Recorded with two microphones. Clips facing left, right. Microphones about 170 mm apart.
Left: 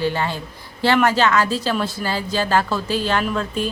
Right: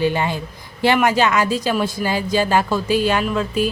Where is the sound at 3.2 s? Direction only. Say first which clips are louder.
Right 3 dB; 5° right (ahead or behind).